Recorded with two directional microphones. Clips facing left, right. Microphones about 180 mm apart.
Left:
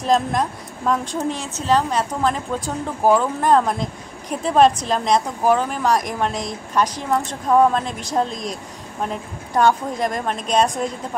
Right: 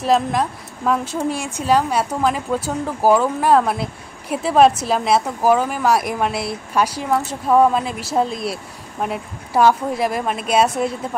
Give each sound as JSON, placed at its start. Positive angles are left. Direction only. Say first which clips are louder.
{"t": 0.0, "sound": "a woman's voice", "louder": "right 1 dB", "side_deg": -5}